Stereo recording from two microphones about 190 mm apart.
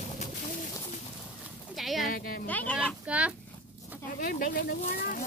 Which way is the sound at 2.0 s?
50° left (ahead or behind).